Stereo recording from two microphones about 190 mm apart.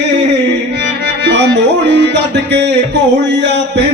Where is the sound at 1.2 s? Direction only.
65° right (ahead or behind).